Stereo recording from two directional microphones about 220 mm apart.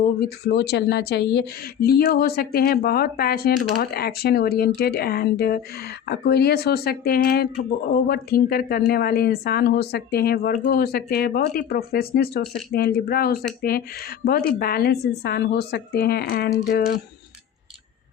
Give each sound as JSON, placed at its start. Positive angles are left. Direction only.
{"t": 0.2, "sound": "speech", "side_deg": 50}